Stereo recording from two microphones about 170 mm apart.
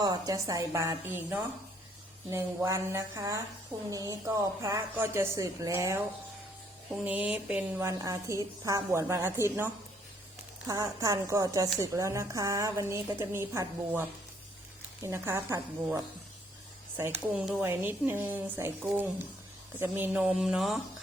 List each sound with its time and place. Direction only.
0.0 s a woman's voice: 20° right (ahead or behind)
2.6 s a woman's voice: 20° right (ahead or behind)
17.0 s a woman's voice: 5° right (ahead or behind)